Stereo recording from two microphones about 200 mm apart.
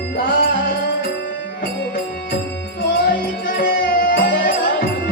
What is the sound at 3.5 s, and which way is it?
Music, 45° left (ahead or behind).